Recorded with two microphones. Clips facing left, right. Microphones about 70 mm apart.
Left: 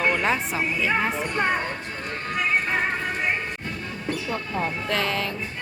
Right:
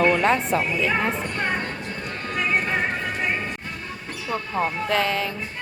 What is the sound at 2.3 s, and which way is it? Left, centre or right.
Music, centre.